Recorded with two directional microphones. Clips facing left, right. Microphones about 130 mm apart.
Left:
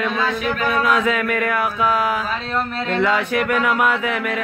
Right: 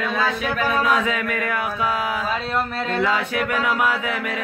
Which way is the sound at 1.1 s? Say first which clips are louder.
Left 4 dB; 60° left (ahead or behind).